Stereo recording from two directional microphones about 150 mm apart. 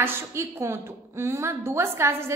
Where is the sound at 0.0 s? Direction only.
15° right (ahead or behind).